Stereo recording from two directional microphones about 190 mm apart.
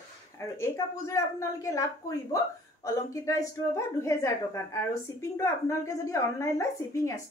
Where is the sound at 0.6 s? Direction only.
15° left (ahead or behind).